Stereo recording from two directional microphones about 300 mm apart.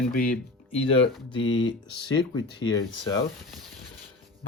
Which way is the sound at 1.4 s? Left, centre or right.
Left.